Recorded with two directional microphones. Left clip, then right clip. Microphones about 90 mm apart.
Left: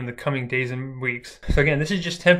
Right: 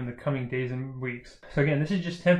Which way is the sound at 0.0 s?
20° left (ahead or behind).